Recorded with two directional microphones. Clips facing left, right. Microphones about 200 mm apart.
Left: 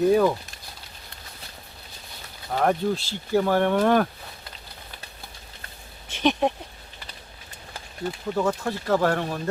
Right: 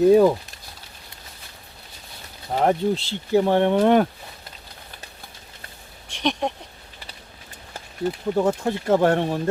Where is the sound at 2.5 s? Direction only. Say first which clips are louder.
Right 2 dB; 20° right (ahead or behind).